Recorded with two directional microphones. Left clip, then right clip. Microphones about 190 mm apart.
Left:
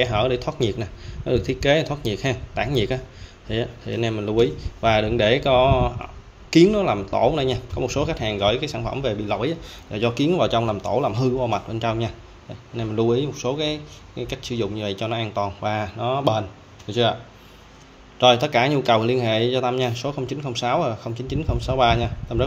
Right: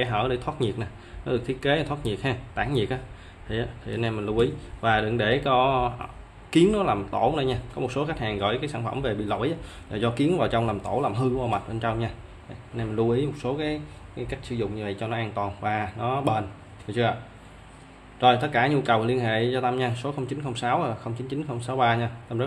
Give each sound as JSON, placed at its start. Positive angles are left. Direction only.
{"t": 0.0, "sound": "speech", "side_deg": 20}
{"t": 18.2, "sound": "speech", "side_deg": 25}